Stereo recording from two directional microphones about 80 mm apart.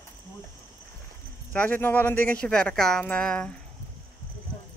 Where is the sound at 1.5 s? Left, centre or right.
Centre.